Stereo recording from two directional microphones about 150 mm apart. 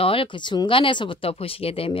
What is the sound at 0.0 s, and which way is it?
Speech, 35° left (ahead or behind).